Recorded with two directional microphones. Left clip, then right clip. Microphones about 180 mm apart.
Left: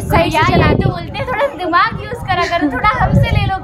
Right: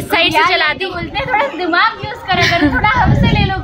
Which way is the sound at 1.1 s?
30° left (ahead or behind).